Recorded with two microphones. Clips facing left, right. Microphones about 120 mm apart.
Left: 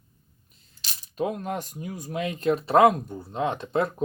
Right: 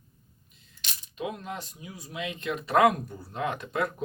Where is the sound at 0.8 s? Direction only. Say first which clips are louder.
Left 7 dB; 40° left (ahead or behind).